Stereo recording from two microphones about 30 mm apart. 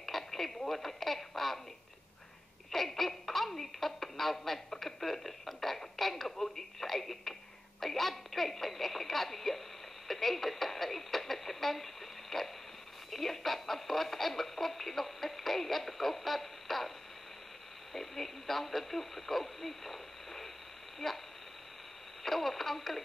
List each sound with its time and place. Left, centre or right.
0.0 s speech: centre
2.7 s speech: centre
17.9 s speech: centre
21.0 s speech: centre
22.2 s speech: centre